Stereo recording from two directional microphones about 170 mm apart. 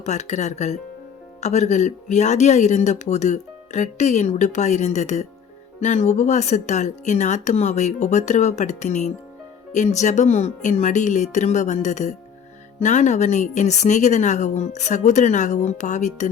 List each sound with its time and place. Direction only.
0.0 s speech: 40° left (ahead or behind)